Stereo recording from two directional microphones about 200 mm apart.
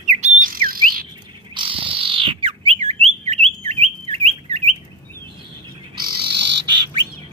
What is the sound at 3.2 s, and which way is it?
Chirp, 30° right (ahead or behind).